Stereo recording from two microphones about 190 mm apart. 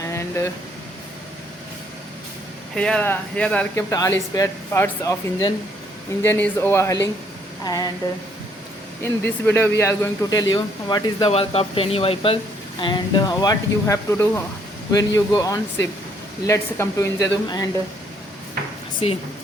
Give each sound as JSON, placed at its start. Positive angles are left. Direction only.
{"t": 0.0, "sound": "a sound", "side_deg": 15}
{"t": 2.7, "sound": "speech", "side_deg": 5}
{"t": 9.0, "sound": "speech", "side_deg": 10}